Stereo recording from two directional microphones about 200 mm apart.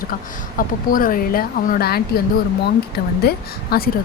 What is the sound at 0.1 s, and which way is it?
A woman's voice, 45° left (ahead or behind).